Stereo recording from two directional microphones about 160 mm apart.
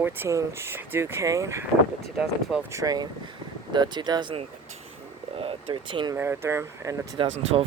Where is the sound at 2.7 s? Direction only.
25° right (ahead or behind).